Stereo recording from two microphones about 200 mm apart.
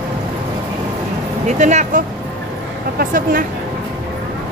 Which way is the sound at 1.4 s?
35° right (ahead or behind).